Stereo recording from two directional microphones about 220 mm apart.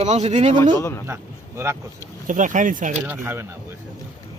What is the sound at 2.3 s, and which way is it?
Speech, 35° right (ahead or behind).